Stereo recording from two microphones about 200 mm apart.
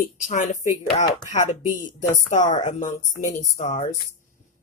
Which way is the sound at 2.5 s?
40° left (ahead or behind).